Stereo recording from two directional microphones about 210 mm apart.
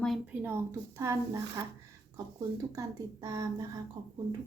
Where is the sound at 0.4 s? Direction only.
10° right (ahead or behind).